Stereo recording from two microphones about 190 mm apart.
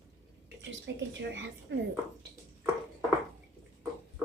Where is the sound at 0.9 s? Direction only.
70° right (ahead or behind).